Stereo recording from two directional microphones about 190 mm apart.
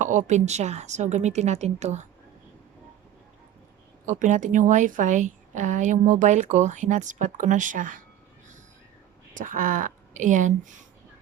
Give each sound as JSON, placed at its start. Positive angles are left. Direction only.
{"t": 0.0, "sound": "a woman's voice", "side_deg": -40}
{"t": 4.0, "sound": "a woman's voice", "side_deg": -40}
{"t": 9.3, "sound": "speech", "side_deg": -45}